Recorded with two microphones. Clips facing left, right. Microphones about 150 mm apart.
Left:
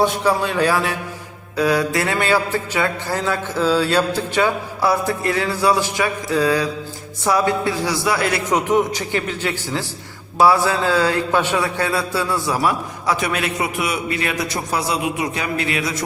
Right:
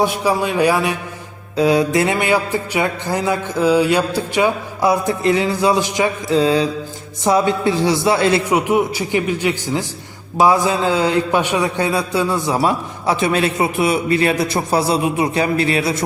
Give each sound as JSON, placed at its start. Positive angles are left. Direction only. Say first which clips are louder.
{"t": 0.0, "sound": "a man's voice", "louder": "right 1 dB", "side_deg": -10}
{"t": 8.4, "sound": "a man's voice", "louder": "right 1 dB", "side_deg": -10}